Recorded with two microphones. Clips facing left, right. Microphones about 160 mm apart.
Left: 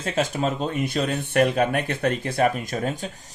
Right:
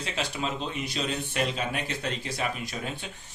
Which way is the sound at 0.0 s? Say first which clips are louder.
Left 8 dB; 45° left (ahead or behind).